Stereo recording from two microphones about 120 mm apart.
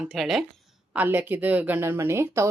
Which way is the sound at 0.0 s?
Centre (ahead or behind).